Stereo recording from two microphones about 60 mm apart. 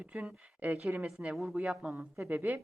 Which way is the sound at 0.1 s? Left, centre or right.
Centre.